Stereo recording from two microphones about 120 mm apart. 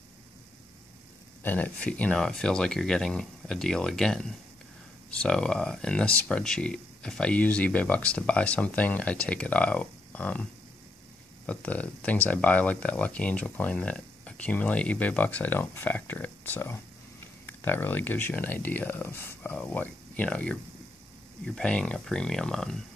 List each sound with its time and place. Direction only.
1.4 s speech: 15° left (ahead or behind)
11.4 s speech: 10° left (ahead or behind)
21.5 s speech: 10° left (ahead or behind)